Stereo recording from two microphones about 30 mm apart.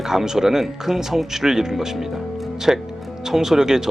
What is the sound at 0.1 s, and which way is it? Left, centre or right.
Speech, centre.